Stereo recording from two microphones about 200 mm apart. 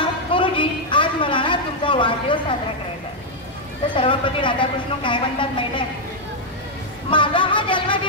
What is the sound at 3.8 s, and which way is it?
A man's voice, 25° left (ahead or behind).